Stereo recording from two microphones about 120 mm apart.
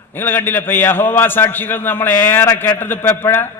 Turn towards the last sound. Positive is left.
turn(degrees=20)  # may be behind; listen again after turning